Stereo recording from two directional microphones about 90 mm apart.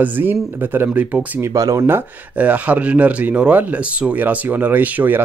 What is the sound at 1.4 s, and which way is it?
Speech, 40° right (ahead or behind).